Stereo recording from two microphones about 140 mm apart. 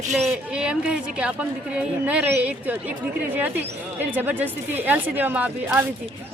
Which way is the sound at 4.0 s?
15° right (ahead or behind).